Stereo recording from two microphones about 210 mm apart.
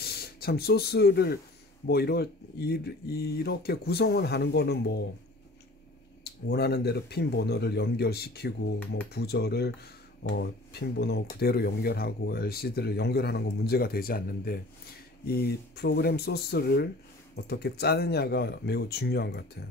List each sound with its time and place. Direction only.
0.0 s speech: 50° left (ahead or behind)
6.2 s speech: 50° left (ahead or behind)